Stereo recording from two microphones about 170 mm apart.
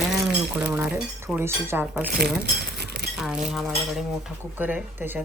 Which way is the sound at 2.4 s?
75° right (ahead or behind).